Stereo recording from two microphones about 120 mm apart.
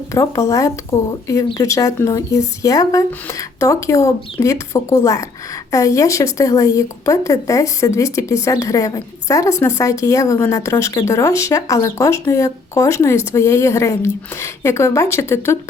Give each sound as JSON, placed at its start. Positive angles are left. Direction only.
{"t": 0.1, "sound": "speech", "side_deg": 25}